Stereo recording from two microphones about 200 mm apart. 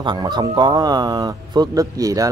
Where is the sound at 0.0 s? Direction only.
20° right (ahead or behind).